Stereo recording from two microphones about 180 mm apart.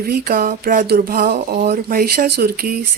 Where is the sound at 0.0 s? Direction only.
55° right (ahead or behind).